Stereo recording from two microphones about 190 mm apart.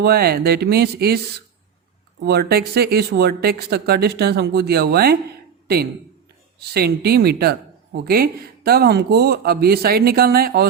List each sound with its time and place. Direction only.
0.0 s speech: 55° right (ahead or behind)
2.2 s a man's voice: 55° right (ahead or behind)